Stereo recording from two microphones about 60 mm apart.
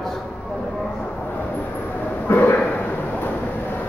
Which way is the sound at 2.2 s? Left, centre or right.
Left.